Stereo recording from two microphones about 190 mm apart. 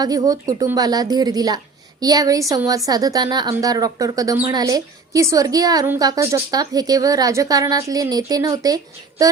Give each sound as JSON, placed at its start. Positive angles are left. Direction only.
{"t": 0.0, "sound": "a woman's voice", "side_deg": -20}